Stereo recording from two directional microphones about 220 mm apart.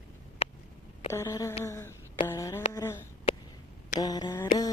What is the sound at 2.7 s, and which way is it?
Speech, 10° left (ahead or behind).